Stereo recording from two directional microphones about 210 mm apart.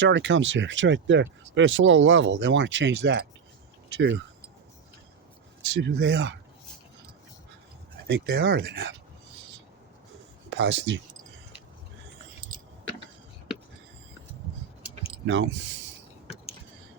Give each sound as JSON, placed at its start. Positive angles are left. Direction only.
{"t": 0.0, "sound": "speech", "side_deg": -60}
{"t": 5.7, "sound": "speech", "side_deg": -55}
{"t": 8.0, "sound": "speech", "side_deg": -55}
{"t": 10.5, "sound": "speech", "side_deg": -60}
{"t": 15.3, "sound": "speech", "side_deg": -60}